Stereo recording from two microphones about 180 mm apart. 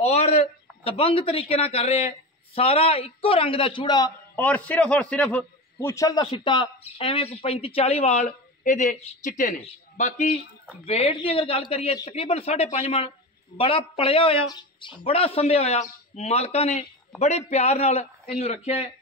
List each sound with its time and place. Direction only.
0.0 s a man's voice: 35° left (ahead or behind)
4.4 s a man's voice: 10° left (ahead or behind); by 10.4 s 45° left (ahead or behind)
10.9 s speech: 35° left (ahead or behind)